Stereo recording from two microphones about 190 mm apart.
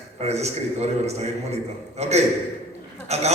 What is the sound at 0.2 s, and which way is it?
A man's voice, 35° right (ahead or behind).